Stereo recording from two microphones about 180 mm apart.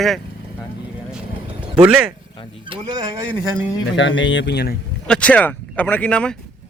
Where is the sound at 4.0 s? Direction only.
90° left; by 4.7 s 70° left (ahead or behind).